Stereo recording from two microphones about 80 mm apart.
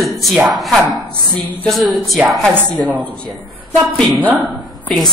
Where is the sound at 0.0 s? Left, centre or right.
Centre.